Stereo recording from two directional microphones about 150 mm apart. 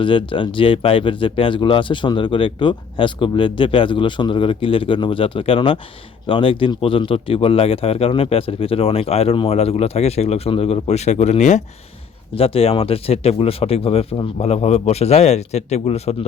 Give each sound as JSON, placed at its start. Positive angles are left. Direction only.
{"t": 0.0, "sound": "speech", "side_deg": 35}
{"t": 12.3, "sound": "speech", "side_deg": 40}